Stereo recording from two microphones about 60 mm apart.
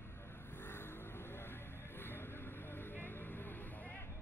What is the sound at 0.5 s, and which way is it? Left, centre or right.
Vehicle, left.